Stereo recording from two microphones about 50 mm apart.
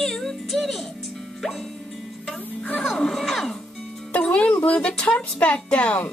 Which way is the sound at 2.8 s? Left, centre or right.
Centre.